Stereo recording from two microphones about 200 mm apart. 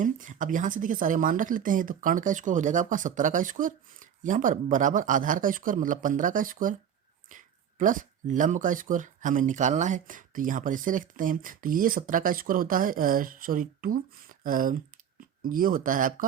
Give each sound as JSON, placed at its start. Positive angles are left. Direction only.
{"t": 0.0, "sound": "speech", "side_deg": -40}